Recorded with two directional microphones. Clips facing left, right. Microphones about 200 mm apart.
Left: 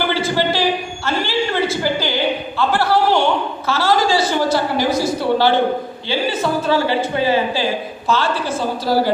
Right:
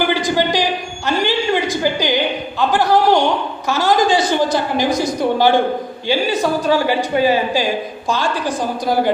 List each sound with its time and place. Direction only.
0.1 s a man's voice: 15° right (ahead or behind)
1.0 s a sound: 15° right (ahead or behind)
3.7 s a woman's voice: 15° right (ahead or behind)